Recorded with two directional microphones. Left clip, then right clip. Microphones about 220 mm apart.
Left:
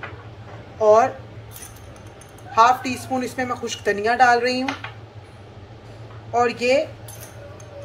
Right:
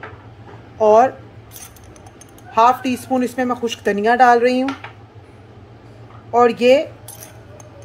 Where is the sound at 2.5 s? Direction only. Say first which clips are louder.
Right 2 dB; 40° right (ahead or behind).